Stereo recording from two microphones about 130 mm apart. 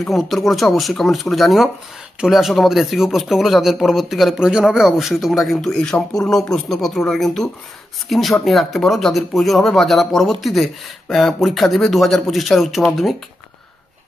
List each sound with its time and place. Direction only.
0.0 s speech: centre (ahead or behind)